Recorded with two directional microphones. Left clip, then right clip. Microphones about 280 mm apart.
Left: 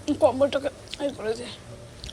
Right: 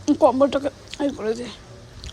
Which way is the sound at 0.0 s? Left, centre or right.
Right.